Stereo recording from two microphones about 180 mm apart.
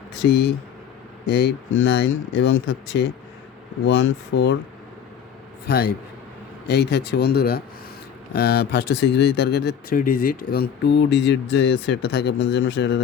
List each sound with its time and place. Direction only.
0.2 s speech: 75° left (ahead or behind)
3.8 s speech: 90° left
5.6 s speech: 60° left (ahead or behind)